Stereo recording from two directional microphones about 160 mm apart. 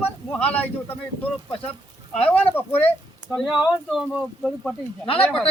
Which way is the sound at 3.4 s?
5° right (ahead or behind).